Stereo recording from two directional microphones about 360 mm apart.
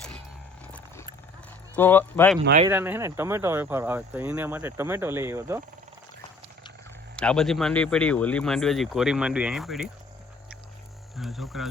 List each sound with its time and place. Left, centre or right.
1.7 s speech: centre
2.4 s speech: right
2.6 s speech: centre
7.2 s speech: centre
11.2 s speech: centre